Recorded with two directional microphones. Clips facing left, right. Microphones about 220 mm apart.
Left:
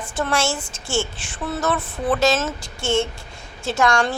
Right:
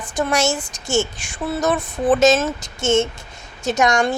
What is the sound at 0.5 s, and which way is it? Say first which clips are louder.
Speech: right 3 dB; 70° right (ahead or behind).